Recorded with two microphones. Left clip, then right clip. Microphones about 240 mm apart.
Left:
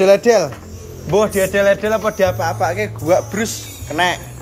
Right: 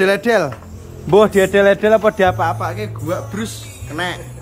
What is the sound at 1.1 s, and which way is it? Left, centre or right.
Speech, right.